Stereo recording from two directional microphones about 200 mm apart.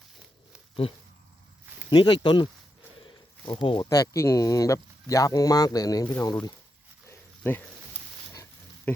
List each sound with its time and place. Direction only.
1.9 s speech: 20° left (ahead or behind)
7.1 s dog: 10° left (ahead or behind)
8.3 s pig: 15° left (ahead or behind)